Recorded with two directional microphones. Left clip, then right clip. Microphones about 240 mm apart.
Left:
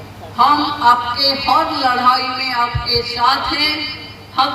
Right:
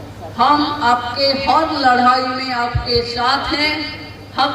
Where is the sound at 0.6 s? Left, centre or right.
Left.